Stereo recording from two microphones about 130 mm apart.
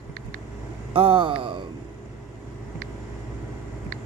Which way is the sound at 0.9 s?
45° right (ahead or behind).